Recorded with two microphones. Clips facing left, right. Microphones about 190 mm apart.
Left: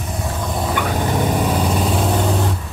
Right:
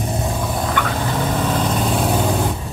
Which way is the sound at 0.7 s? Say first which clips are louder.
Left 1 dB; 15° left (ahead or behind).